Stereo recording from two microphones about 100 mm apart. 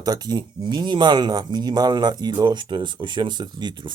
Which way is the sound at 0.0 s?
40° right (ahead or behind).